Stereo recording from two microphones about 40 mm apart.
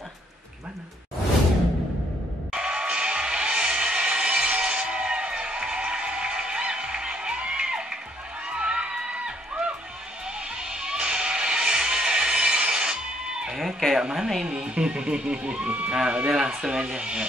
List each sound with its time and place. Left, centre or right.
2.5 s music: right
13.9 s speech: centre
15.9 s speech: centre